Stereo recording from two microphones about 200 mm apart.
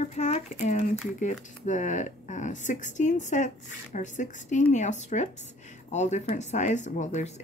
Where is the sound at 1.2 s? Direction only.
40° left (ahead or behind).